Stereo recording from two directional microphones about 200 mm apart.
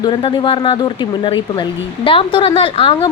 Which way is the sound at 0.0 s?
25° left (ahead or behind).